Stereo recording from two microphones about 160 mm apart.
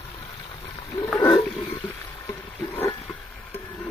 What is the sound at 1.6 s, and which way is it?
Wild animals, 15° left (ahead or behind).